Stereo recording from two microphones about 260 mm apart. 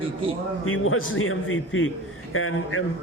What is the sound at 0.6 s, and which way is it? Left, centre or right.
A man's voice, left.